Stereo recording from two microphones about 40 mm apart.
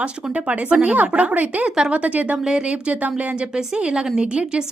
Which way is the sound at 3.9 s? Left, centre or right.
Right.